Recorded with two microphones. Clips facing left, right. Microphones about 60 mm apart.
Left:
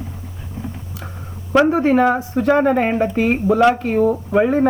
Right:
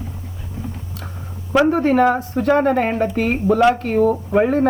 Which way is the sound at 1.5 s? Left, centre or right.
Centre.